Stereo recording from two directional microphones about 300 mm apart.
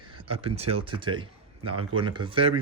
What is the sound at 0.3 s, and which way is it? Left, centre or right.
Speech, centre.